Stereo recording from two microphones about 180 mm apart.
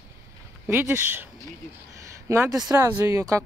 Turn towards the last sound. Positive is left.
turn(degrees=-15)  # may be behind; listen again after turning